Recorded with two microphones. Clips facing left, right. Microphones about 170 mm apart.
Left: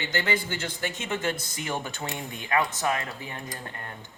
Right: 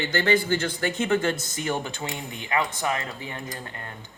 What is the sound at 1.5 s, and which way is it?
Speech, 35° right (ahead or behind).